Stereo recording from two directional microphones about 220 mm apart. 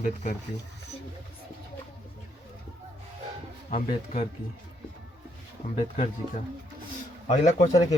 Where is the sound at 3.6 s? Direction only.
30° left (ahead or behind).